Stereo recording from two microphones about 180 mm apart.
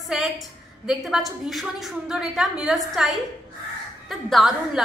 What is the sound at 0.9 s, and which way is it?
A woman's voice, centre (ahead or behind).